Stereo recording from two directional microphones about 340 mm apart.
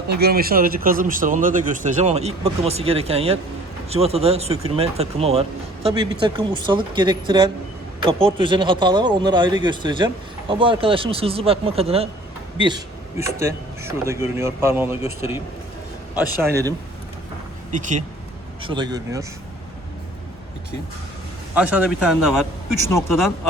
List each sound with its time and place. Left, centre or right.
0.1 s speech: right; by 16.7 s centre
17.7 s speech: right
21.5 s a man's voice: centre